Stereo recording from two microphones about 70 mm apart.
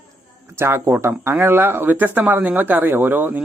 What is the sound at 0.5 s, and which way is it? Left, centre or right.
Speech, right.